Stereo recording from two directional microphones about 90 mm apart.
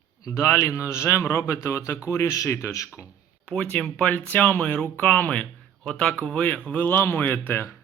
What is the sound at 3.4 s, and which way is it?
Speech, 15° left (ahead or behind).